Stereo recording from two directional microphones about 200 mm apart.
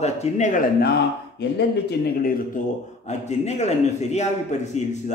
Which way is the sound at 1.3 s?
55° left (ahead or behind).